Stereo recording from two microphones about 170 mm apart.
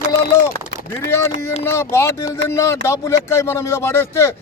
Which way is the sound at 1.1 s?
15° left (ahead or behind).